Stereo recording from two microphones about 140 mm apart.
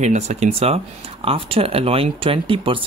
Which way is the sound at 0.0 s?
55° right (ahead or behind).